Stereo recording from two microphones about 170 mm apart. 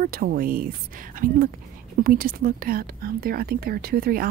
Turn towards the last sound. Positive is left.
turn(degrees=-60)  # may be behind; listen again after turning